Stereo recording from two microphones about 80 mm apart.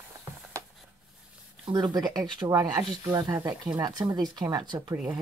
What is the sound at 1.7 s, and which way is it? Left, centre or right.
Speech, right.